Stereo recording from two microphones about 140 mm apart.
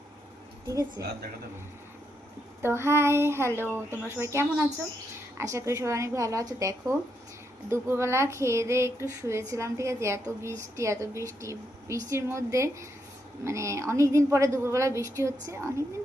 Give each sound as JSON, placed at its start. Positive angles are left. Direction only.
{"t": 0.7, "sound": "speech", "side_deg": -25}
{"t": 2.6, "sound": "speech", "side_deg": -20}